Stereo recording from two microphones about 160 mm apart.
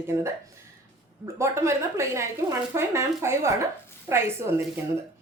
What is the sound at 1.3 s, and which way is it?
Speech, 15° right (ahead or behind).